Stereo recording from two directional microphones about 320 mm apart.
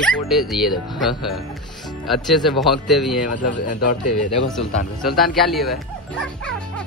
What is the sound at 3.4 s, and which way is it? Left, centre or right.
Speech, left.